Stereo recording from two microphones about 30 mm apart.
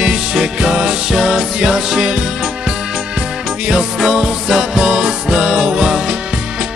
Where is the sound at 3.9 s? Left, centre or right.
Centre.